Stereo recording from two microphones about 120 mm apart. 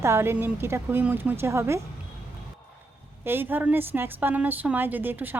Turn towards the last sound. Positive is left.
turn(degrees=-15)  # may be behind; listen again after turning